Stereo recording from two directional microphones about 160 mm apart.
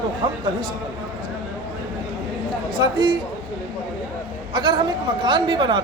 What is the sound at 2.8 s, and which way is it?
Speech, 30° right (ahead or behind).